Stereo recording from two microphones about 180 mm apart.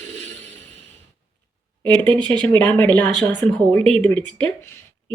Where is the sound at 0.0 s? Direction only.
40° right (ahead or behind).